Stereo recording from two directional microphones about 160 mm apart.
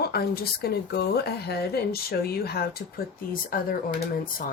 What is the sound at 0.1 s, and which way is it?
Speech, 75° left (ahead or behind).